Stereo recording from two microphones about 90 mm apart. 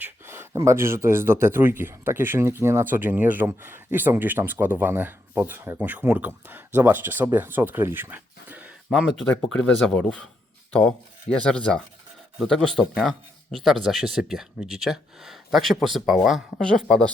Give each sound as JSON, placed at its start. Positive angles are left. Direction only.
{"t": 0.0, "sound": "a sound", "side_deg": -25}
{"t": 0.6, "sound": "speech", "side_deg": -30}
{"t": 9.2, "sound": "speech", "side_deg": 10}
{"t": 16.6, "sound": "speech", "side_deg": 10}